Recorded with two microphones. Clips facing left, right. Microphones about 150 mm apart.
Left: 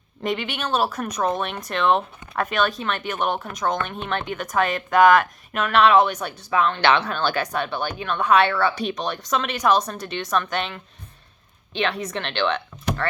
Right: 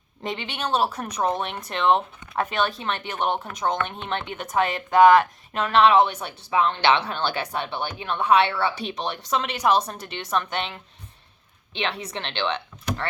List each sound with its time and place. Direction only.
0.2 s a woman's voice: 25° right (ahead or behind)
11.8 s a woman's voice: 25° right (ahead or behind)